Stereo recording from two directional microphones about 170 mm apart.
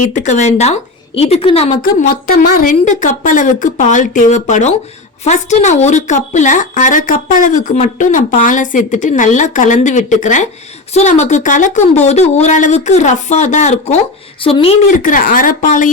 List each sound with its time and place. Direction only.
0.0 s a woman's voice: 45° left (ahead or behind)
1.8 s a woman's voice: 55° left (ahead or behind); by 14.8 s 30° left (ahead or behind)
14.8 s a woman's voice: 50° left (ahead or behind)